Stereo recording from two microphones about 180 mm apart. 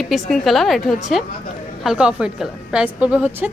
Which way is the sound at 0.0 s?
Centre (ahead or behind).